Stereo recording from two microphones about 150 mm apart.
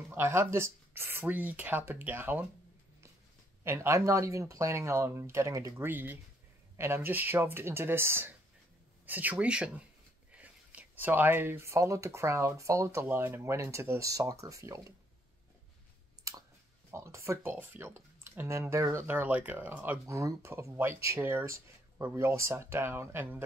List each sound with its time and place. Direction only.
0.1 s speech: 15° right (ahead or behind)
3.6 s speech: 20° right (ahead or behind)
16.3 s a sound: 20° right (ahead or behind)
16.9 s speech: 20° right (ahead or behind)